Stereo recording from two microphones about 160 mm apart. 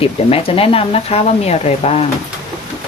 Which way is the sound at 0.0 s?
35° left (ahead or behind).